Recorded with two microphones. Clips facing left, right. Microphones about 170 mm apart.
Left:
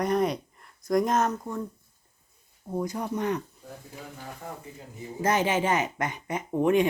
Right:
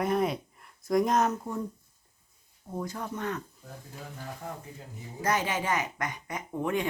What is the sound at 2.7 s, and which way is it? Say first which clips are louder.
Speech: left 5 dB; 15° left (ahead or behind).